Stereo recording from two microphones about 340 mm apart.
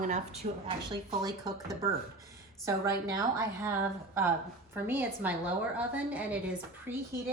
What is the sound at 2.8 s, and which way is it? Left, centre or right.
A woman's voice, centre.